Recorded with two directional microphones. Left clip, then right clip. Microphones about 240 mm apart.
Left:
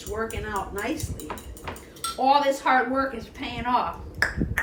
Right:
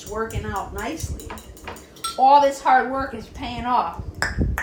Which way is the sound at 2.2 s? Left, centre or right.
Centre.